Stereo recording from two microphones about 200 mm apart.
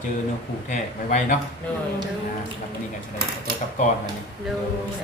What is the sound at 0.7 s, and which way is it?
Speech, 40° left (ahead or behind).